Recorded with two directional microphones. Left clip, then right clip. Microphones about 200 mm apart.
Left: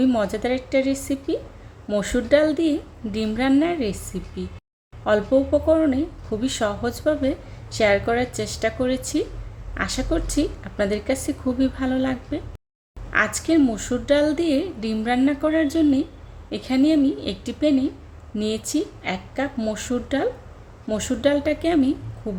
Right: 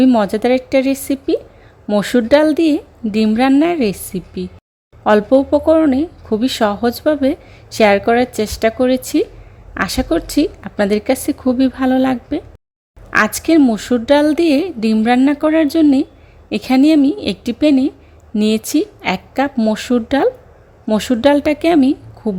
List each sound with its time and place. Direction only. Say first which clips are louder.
0.0 s speech: right 8 dB; 35° right (ahead or behind)